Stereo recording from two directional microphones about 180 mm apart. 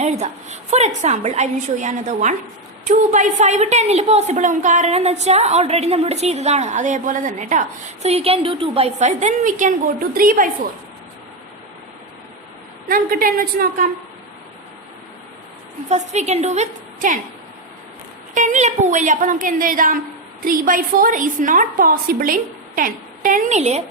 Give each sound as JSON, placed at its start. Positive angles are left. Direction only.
{"t": 0.0, "sound": "a woman's voice", "side_deg": -40}
{"t": 8.0, "sound": "a woman's voice", "side_deg": -35}
{"t": 12.9, "sound": "a woman's voice", "side_deg": -50}
{"t": 15.9, "sound": "a woman's voice", "side_deg": -40}
{"t": 18.3, "sound": "a woman's voice", "side_deg": -45}